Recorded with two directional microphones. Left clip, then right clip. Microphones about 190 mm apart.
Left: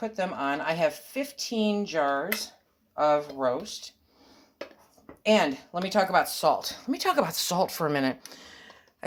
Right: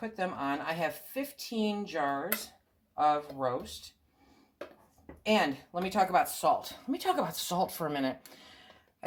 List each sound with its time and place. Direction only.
0.0 s speech: 45° left (ahead or behind)
5.2 s speech: 45° left (ahead or behind)